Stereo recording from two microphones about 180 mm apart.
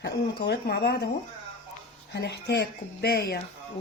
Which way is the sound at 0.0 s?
70° left (ahead or behind).